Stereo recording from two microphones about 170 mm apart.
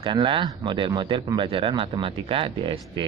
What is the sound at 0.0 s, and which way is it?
Speech, 30° right (ahead or behind).